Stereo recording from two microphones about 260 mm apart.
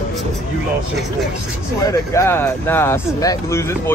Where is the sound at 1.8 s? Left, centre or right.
Centre.